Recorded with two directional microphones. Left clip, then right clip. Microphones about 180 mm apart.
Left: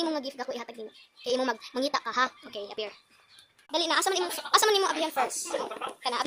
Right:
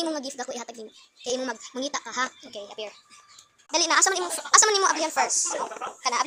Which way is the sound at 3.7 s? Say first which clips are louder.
Right 4 dB; 5° right (ahead or behind).